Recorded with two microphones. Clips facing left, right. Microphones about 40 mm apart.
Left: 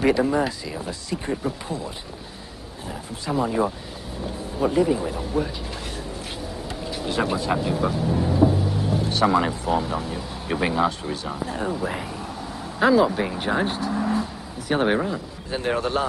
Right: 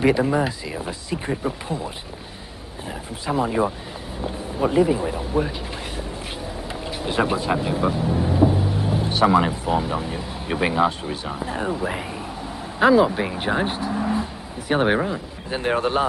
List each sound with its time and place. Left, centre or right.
0.0 s speech: centre
2.9 s speech: centre
7.1 s speech: centre
8.4 s vehicle: centre
9.0 s speech: centre